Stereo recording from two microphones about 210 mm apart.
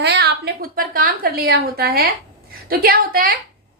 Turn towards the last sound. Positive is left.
turn(degrees=-45)  # may be behind; listen again after turning